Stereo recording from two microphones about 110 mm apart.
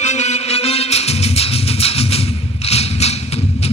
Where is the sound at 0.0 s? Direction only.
90° left; by 2.2 s 65° left (ahead or behind).